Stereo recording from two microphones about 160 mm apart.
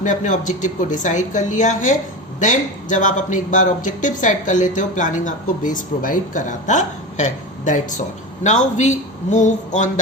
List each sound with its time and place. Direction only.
0.0 s speech: 50° left (ahead or behind)